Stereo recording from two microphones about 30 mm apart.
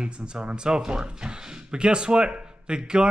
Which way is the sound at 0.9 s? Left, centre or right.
Right.